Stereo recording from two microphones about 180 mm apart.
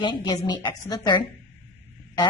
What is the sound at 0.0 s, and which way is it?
A woman's voice, 25° left (ahead or behind).